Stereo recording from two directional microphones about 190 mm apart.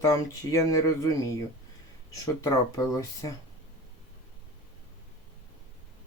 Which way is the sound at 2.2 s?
20° left (ahead or behind).